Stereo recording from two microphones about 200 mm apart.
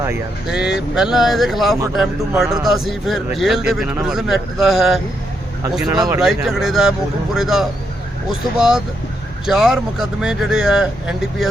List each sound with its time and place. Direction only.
0.4 s a man's voice: 5° right (ahead or behind)
5.8 s speech: 20° right (ahead or behind)
6.1 s a man's voice: centre (ahead or behind)